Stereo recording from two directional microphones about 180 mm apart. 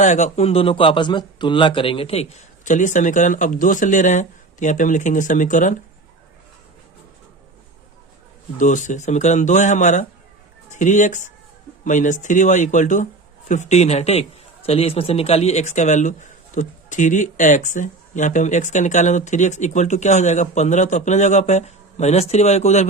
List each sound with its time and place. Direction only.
0.0 s a man's voice: 40° left (ahead or behind)
8.5 s a man's voice: 45° left (ahead or behind)